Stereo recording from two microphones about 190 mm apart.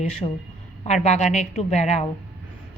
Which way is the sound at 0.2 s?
25° left (ahead or behind).